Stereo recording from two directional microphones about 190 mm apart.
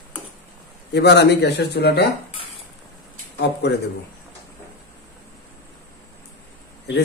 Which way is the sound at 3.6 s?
60° left (ahead or behind).